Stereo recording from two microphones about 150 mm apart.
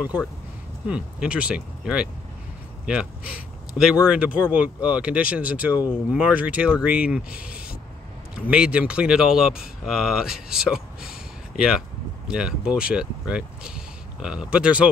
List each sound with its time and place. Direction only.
0.8 s speech: 5° right (ahead or behind)